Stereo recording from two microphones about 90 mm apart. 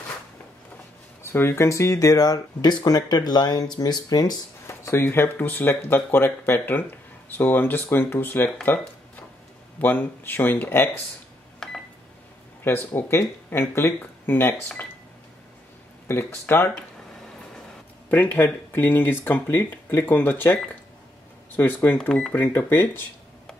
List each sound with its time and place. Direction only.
1.2 s speech: 30° left (ahead or behind); by 4.4 s 45° left (ahead or behind)
4.6 s speech: 30° left (ahead or behind)
9.8 s speech: 20° left (ahead or behind)
11.6 s telephone dialing: 5° left (ahead or behind)
12.6 s speech: 25° left (ahead or behind)
16.1 s speech: 25° left (ahead or behind)
18.1 s speech: 20° left (ahead or behind)